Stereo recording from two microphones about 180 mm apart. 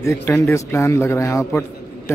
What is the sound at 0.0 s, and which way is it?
A man's voice, 15° left (ahead or behind).